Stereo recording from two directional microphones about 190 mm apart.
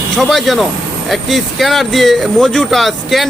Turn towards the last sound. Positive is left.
turn(degrees=0)  # may be behind; listen again after turning